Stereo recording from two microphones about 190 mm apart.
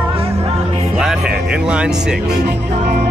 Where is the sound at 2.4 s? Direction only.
60° right (ahead or behind).